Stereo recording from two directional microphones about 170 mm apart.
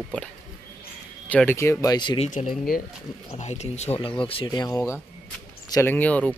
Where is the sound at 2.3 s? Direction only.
50° left (ahead or behind).